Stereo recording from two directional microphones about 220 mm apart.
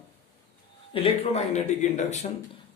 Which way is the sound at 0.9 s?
25° left (ahead or behind).